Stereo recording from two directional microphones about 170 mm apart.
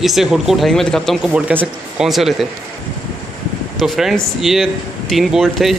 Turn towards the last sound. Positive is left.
turn(degrees=0)  # may be behind; listen again after turning